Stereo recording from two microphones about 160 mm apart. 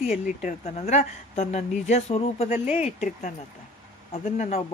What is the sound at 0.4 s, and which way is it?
Speech, 45° left (ahead or behind).